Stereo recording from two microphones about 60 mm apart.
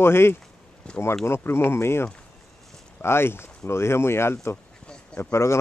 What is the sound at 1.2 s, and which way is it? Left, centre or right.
Speech, left.